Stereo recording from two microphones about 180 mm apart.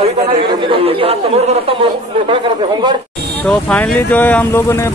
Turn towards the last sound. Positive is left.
turn(degrees=15)  # may be behind; listen again after turning